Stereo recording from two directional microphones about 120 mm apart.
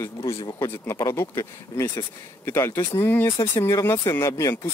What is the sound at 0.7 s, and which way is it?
Speech, 25° left (ahead or behind).